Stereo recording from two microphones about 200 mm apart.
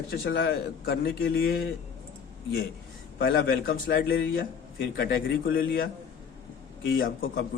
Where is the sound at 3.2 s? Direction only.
45° left (ahead or behind).